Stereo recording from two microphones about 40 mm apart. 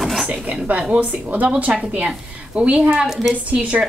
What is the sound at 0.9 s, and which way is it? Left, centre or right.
Speech, right.